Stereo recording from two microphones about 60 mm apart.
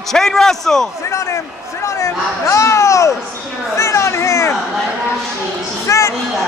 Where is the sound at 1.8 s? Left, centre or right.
Left.